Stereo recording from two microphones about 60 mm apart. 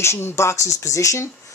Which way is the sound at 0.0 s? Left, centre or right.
Left.